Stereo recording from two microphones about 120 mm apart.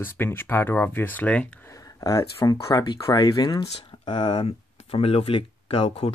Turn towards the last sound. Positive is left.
turn(degrees=50)  # may be behind; listen again after turning